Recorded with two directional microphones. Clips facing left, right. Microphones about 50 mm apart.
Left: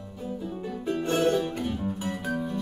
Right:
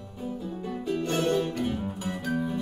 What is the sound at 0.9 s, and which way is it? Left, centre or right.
Music, centre.